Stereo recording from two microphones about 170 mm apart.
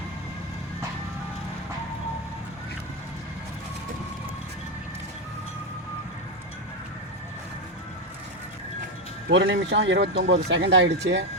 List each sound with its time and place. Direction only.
9.3 s speech: 90° right